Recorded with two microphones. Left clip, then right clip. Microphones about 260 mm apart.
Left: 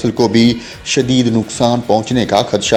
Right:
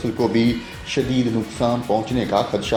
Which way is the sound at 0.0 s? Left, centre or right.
Left.